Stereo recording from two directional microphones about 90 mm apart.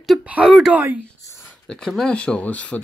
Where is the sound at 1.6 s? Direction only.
5° left (ahead or behind).